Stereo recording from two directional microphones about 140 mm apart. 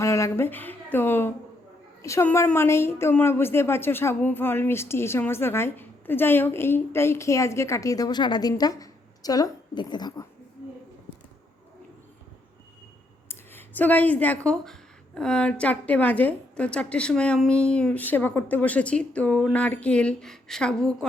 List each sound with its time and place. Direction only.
0.0 s a woman's voice: 20° left (ahead or behind)
13.2 s a woman's voice: 15° left (ahead or behind)